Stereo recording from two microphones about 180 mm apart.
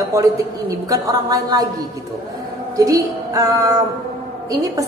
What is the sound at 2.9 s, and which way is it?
Speech, 20° right (ahead or behind).